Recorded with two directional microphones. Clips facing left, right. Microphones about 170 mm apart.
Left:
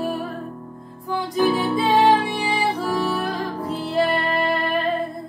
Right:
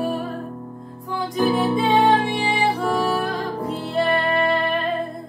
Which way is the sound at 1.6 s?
Centre (ahead or behind).